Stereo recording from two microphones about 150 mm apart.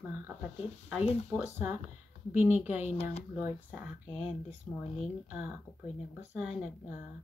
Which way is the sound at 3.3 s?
10° right (ahead or behind).